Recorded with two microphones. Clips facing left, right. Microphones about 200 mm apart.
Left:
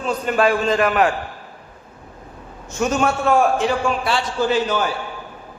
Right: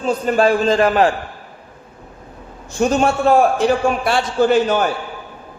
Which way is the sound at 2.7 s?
30° right (ahead or behind).